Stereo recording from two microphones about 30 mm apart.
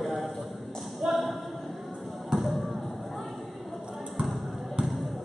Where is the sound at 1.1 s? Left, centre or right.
Centre.